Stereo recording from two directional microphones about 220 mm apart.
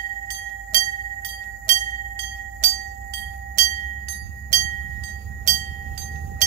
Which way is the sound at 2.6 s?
35° right (ahead or behind).